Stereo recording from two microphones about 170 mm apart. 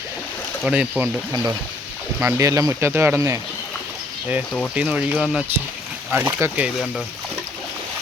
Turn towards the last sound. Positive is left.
turn(degrees=-5)  # may be behind; listen again after turning